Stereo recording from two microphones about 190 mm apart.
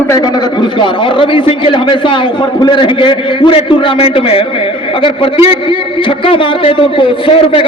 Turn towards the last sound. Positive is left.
turn(degrees=30)  # may be behind; listen again after turning